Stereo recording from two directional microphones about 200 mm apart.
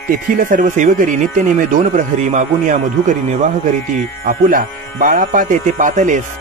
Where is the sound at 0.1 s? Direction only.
45° right (ahead or behind).